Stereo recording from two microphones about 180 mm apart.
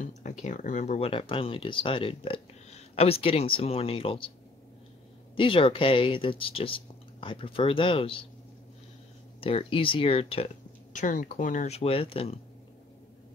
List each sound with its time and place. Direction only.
0.2 s speech: 45° left (ahead or behind)
5.3 s speech: 30° left (ahead or behind)
9.4 s speech: 30° left (ahead or behind)
10.9 s speech: 45° left (ahead or behind)